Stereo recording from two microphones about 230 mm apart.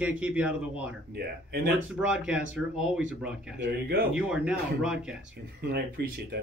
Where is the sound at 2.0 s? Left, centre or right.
Centre.